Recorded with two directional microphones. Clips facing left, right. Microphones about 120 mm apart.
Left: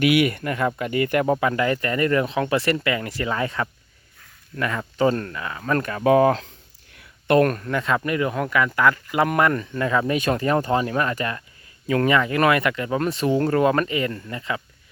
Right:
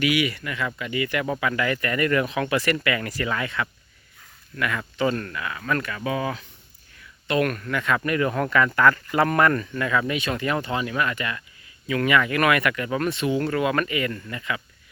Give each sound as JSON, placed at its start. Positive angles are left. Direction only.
{"t": 0.0, "sound": "speech", "side_deg": 55}
{"t": 7.4, "sound": "speech", "side_deg": 35}
{"t": 9.8, "sound": "speech", "side_deg": 30}
{"t": 10.2, "sound": "speech", "side_deg": 40}